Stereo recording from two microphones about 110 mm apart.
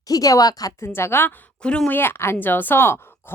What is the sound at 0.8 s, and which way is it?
Speech, 20° left (ahead or behind).